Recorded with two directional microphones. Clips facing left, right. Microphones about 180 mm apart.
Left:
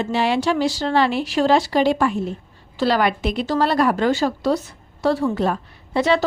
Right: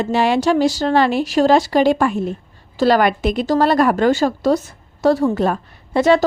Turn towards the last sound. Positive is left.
turn(degrees=-45)  # may be behind; listen again after turning